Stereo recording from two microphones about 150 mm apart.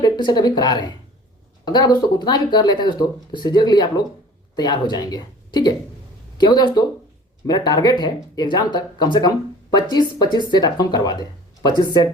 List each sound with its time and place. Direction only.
0.0 s speech: 30° left (ahead or behind)